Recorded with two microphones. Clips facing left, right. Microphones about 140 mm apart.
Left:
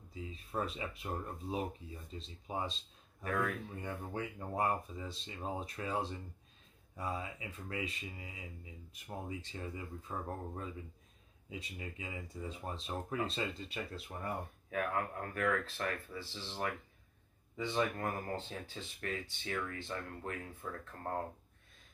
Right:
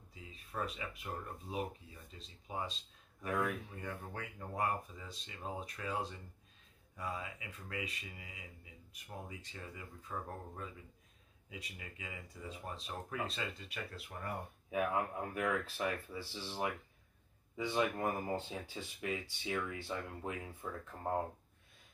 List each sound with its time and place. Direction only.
0.1 s a sound: 30° left (ahead or behind)
1.0 s speech: 25° left (ahead or behind)
3.3 s speech: 15° right (ahead or behind)
3.8 s speech: 25° left (ahead or behind)
14.7 s speech: 10° right (ahead or behind)